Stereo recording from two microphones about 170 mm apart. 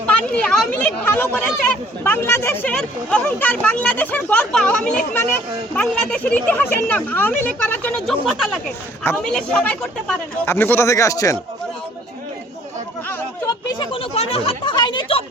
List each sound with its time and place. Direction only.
0.0 s speech: 5° left (ahead or behind)
13.1 s chatter: 15° left (ahead or behind)
13.7 s speech: 35° left (ahead or behind)